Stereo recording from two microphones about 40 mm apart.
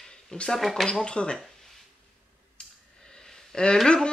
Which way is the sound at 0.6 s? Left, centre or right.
Centre.